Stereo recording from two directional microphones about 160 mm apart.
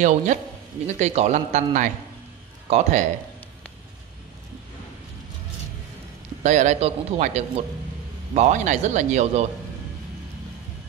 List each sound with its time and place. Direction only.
0.0 s a man's voice: 50° right (ahead or behind)
6.4 s a man's voice: 45° right (ahead or behind)